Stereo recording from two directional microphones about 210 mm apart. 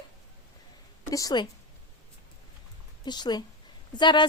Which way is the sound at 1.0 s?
15° left (ahead or behind).